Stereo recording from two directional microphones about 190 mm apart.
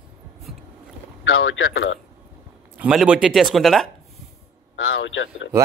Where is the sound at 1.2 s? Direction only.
90° left.